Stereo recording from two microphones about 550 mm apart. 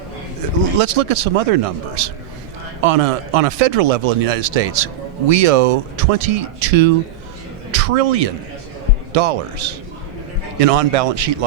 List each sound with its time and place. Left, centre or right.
0.6 s a man's voice: right